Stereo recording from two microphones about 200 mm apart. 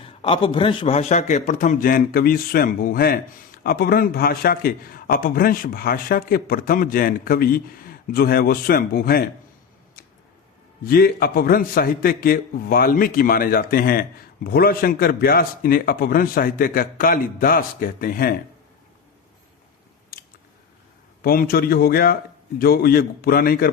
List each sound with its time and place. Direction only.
0.0 s a man's voice: 25° left (ahead or behind); by 9.2 s 45° left (ahead or behind)
10.8 s a man's voice: 50° left (ahead or behind)
21.2 s a man's voice: 50° left (ahead or behind)